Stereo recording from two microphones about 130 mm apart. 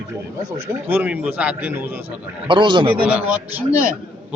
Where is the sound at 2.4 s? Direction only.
35° right (ahead or behind).